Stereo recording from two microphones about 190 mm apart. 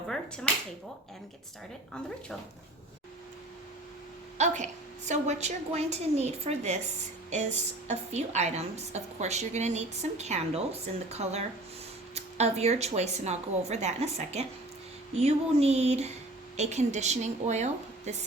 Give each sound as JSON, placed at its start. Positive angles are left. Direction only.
{"t": 4.4, "sound": "a woman's voice", "side_deg": -40}